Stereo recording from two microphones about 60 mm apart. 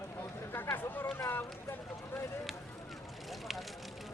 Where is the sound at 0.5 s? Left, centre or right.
Left.